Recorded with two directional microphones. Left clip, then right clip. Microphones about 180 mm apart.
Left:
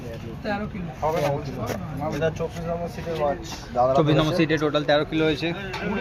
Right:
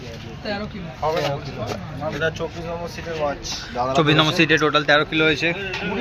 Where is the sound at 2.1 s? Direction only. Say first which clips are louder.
Right 2 dB; 20° left (ahead or behind).